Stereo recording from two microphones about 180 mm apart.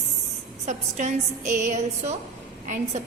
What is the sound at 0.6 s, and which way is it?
A woman's voice, 40° right (ahead or behind).